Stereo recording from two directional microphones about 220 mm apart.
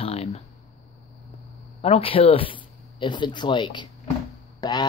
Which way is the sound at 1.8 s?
25° left (ahead or behind).